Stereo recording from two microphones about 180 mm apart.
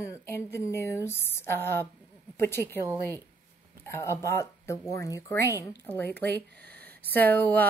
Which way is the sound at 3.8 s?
15° left (ahead or behind).